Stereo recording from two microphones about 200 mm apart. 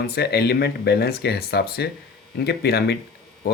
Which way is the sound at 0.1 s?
55° left (ahead or behind).